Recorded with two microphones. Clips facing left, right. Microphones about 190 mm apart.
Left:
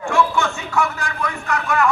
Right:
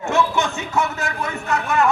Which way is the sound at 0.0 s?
20° right (ahead or behind).